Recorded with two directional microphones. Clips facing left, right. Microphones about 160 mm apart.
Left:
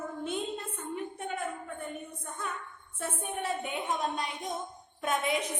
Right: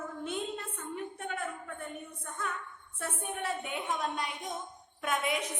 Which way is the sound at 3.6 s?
25° left (ahead or behind).